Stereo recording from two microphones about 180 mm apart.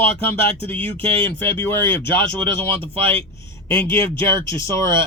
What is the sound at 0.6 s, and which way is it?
Speech, 10° left (ahead or behind).